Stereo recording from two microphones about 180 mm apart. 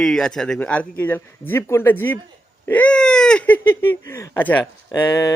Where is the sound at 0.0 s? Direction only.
5° left (ahead or behind).